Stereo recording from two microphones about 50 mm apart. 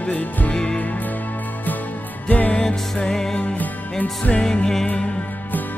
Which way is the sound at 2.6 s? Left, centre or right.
Centre.